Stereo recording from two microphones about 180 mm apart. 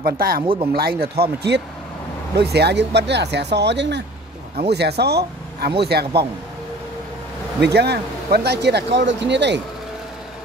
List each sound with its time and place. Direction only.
0.0 s speech: 55° right (ahead or behind)
0.4 s speech: 30° right (ahead or behind)
0.7 s speech: 55° right (ahead or behind)
7.6 s speech: 65° right (ahead or behind)